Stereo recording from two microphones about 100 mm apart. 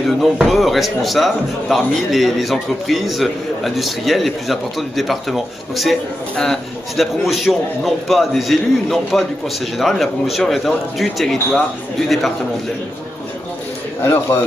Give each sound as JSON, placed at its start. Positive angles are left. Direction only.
{"t": 0.0, "sound": "speech", "side_deg": 0}
{"t": 14.0, "sound": "a man's voice", "side_deg": 20}